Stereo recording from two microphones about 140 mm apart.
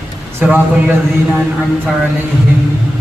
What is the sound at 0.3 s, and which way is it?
Speech, 10° right (ahead or behind).